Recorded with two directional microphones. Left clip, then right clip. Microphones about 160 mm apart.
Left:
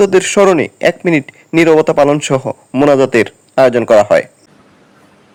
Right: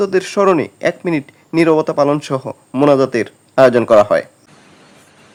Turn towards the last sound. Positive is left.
turn(degrees=30)  # may be behind; listen again after turning